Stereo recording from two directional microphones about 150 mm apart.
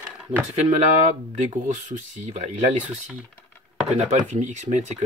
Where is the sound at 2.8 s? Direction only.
10° right (ahead or behind).